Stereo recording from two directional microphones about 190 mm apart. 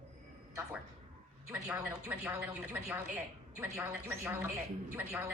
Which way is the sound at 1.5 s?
10° right (ahead or behind).